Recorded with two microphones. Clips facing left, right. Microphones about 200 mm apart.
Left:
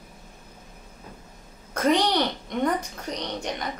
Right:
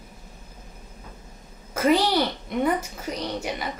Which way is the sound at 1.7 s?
5° right (ahead or behind).